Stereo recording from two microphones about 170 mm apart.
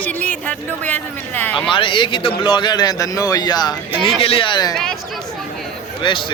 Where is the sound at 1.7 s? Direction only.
30° left (ahead or behind).